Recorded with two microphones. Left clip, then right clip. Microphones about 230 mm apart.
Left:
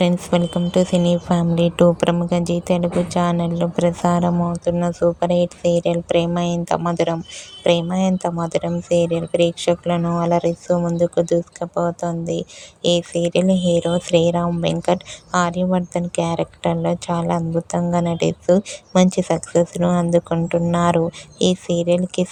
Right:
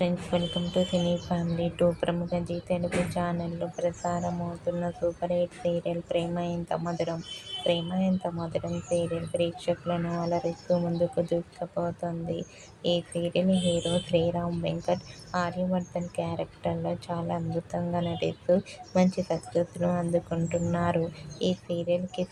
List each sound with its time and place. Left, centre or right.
0.0 s speech: left